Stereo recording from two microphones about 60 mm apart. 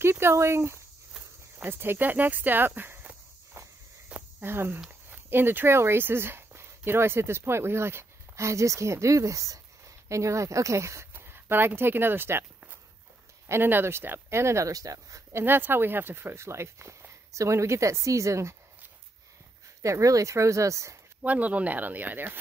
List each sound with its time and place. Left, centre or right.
0.0 s speech: right
3.6 s walk: right
4.4 s speech: right
11.1 s speech: right
13.5 s speech: right
14.7 s speech: right
15.3 s speech: right
19.8 s speech: right
21.2 s speech: right